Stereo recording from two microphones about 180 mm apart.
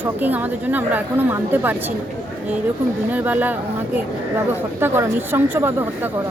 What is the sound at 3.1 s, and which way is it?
Speech, 10° right (ahead or behind).